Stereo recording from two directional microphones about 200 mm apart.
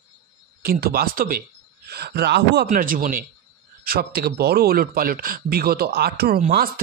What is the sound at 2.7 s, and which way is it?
Speech, 45° right (ahead or behind).